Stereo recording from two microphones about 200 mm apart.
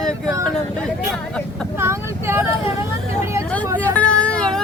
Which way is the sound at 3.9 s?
5° left (ahead or behind).